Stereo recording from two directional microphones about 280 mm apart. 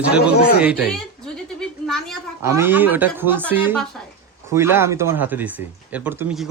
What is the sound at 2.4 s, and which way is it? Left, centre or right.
Speech, centre.